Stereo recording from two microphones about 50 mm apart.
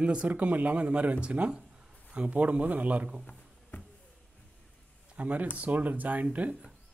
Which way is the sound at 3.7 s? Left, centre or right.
Left.